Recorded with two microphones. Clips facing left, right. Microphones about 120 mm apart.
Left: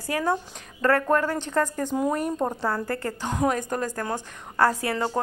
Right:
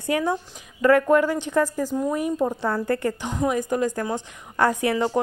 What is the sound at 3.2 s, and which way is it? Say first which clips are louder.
Speech: left 5 dB; centre (ahead or behind).